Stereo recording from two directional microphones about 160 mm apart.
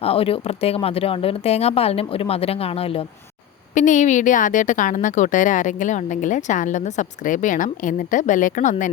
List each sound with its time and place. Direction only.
0.0 s speech: 35° left (ahead or behind)
3.8 s speech: 50° left (ahead or behind)